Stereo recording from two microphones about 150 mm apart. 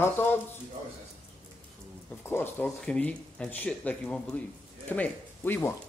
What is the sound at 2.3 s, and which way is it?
A man's voice, 10° left (ahead or behind).